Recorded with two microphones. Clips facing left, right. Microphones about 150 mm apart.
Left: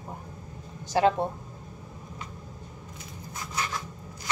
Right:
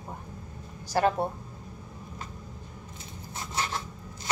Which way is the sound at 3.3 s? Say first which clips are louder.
Right 1 dB; 30° right (ahead or behind).